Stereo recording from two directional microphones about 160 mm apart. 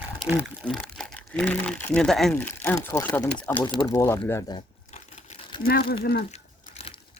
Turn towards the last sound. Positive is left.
turn(degrees=40)  # may be behind; listen again after turning